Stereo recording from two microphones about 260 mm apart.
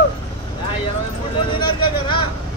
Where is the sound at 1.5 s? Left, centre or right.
Centre.